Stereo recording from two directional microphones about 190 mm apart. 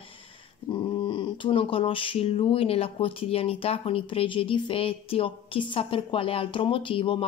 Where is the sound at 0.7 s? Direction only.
25° left (ahead or behind).